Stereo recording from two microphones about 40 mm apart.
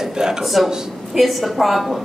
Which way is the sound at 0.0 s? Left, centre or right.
Centre.